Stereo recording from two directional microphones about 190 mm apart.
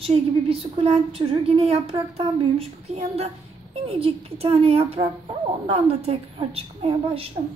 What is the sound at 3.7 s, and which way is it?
A woman's voice, 30° right (ahead or behind).